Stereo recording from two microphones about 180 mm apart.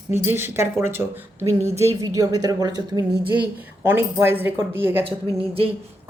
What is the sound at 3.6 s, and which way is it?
Speech, 10° right (ahead or behind).